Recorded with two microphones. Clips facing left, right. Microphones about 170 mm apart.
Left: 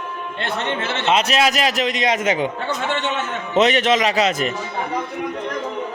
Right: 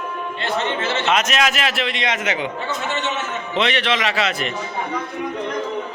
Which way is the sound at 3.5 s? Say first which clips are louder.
Left 5 dB; 45° left (ahead or behind).